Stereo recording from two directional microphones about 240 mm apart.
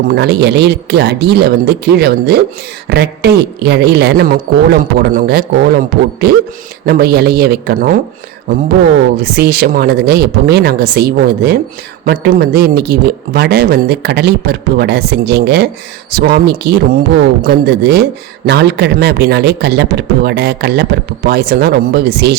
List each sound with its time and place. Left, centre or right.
0.1 s speech: right
9.1 s speech: right